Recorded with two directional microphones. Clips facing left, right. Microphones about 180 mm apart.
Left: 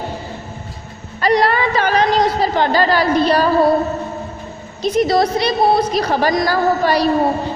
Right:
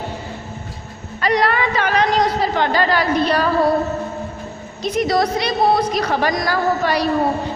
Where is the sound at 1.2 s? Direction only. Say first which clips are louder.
Left 3 dB; 35° left (ahead or behind).